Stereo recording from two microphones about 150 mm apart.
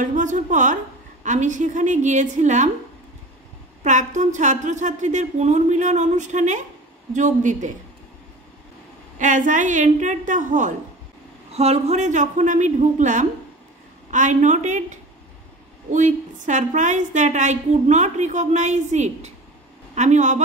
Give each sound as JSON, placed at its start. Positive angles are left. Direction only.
{"t": 0.0, "sound": "a woman's voice", "side_deg": -55}
{"t": 3.8, "sound": "a woman's voice", "side_deg": -55}
{"t": 9.2, "sound": "a woman's voice", "side_deg": -55}
{"t": 11.5, "sound": "a woman's voice", "side_deg": -45}